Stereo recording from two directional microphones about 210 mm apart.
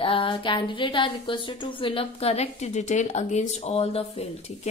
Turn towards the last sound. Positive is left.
turn(degrees=30)  # may be behind; listen again after turning